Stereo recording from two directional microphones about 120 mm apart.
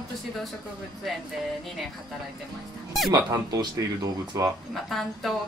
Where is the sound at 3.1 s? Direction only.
35° right (ahead or behind).